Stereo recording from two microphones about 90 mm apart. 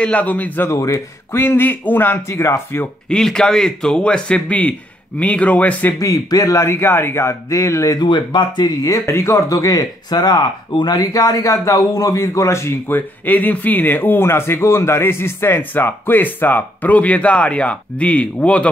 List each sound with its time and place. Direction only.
0.0 s speech: 15° left (ahead or behind)
0.7 s speech: 35° left (ahead or behind)
1.4 s speech: 25° left (ahead or behind)
3.1 s speech: 5° left (ahead or behind)
5.9 s speech: 40° left (ahead or behind)
8.0 s speech: 60° left (ahead or behind); by 18.7 s 15° left (ahead or behind)